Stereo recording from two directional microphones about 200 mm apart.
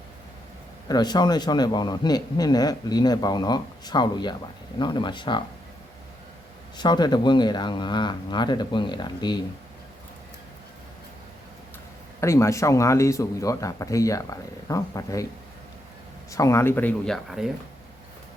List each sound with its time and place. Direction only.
0.9 s a man's voice: 20° left (ahead or behind)
6.7 s a man's voice: 20° left (ahead or behind)
12.2 s speech: 15° left (ahead or behind)
16.3 s speech: 15° left (ahead or behind); by 17.5 s centre (ahead or behind)